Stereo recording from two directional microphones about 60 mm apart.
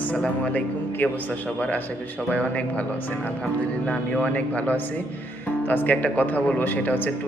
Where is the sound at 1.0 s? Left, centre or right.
Left.